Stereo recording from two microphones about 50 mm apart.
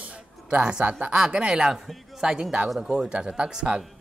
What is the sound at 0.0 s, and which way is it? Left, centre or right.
Music, right.